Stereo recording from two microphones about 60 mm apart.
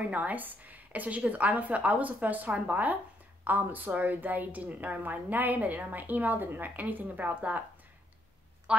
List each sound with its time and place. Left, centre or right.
0.0 s a woman's voice: right
8.7 s speech: centre